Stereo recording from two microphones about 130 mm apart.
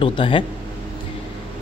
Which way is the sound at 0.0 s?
40° left (ahead or behind).